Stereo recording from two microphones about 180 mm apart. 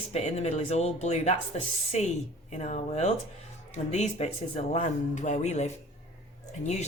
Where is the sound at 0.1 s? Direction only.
40° left (ahead or behind).